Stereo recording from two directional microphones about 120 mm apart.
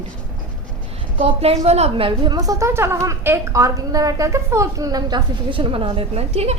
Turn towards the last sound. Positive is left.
turn(degrees=-60)  # may be behind; listen again after turning